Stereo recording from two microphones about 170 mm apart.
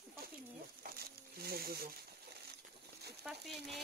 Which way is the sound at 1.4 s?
65° right (ahead or behind).